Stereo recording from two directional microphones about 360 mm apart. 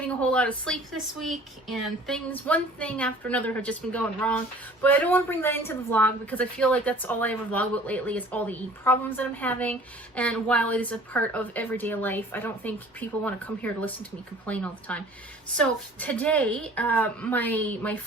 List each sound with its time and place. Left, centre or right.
0.0 s speech: centre